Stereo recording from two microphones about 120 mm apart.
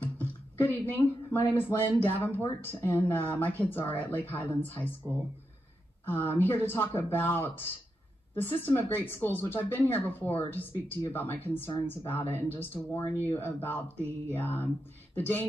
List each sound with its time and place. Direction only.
0.0 s a woman's voice: 15° left (ahead or behind)
6.0 s a woman's voice: 15° left (ahead or behind)